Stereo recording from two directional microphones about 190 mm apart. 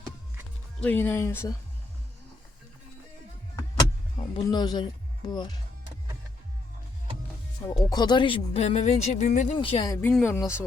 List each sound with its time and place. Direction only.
0.8 s speech: 10° left (ahead or behind)
4.2 s speech: 20° left (ahead or behind)
7.9 s speech: 20° left (ahead or behind); by 9.5 s 40° left (ahead or behind)
9.6 s speech: 25° left (ahead or behind)
9.9 s speech: 10° left (ahead or behind)